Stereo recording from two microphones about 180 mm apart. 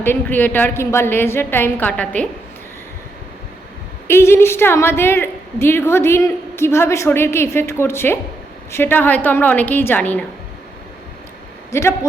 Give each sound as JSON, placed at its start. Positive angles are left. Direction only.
{"t": 0.0, "sound": "a woman's voice", "side_deg": 10}
{"t": 4.0, "sound": "a woman's voice", "side_deg": 15}
{"t": 11.7, "sound": "a woman's voice", "side_deg": 15}